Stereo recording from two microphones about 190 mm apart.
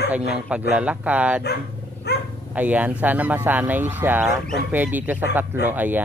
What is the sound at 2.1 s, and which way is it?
Dog, 60° left (ahead or behind).